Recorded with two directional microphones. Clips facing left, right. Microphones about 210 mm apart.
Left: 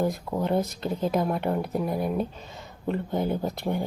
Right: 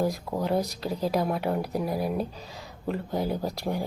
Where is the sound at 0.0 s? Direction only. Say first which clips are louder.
Left 1 dB; centre (ahead or behind).